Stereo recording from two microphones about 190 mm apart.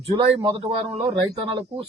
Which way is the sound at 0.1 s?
25° right (ahead or behind).